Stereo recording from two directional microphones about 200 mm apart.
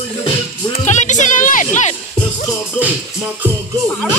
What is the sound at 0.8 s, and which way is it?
Music, 35° left (ahead or behind).